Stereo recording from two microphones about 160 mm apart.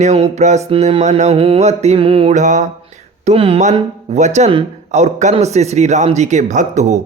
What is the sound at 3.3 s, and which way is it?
Mantra, 35° right (ahead or behind).